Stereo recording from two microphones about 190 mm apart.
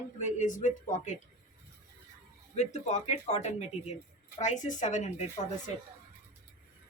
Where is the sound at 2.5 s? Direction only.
40° left (ahead or behind).